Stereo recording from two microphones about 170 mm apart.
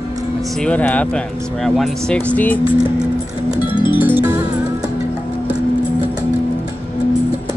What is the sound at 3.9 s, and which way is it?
Music, 10° right (ahead or behind).